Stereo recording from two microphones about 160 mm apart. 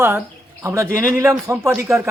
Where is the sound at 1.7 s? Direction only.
5° right (ahead or behind).